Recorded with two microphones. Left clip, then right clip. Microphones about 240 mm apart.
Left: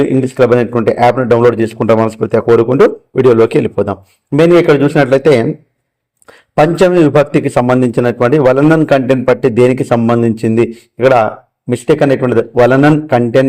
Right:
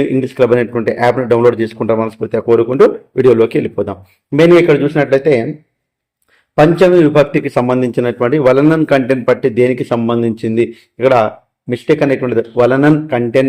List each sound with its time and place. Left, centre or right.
0.0 s speech: centre
6.6 s speech: left